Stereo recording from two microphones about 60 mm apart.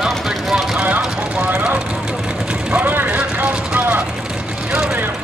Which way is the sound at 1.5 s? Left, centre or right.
Right.